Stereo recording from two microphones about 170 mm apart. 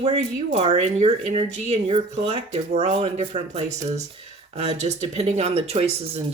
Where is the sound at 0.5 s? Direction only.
40° right (ahead or behind).